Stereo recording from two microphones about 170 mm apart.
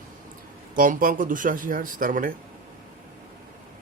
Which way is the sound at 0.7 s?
55° right (ahead or behind).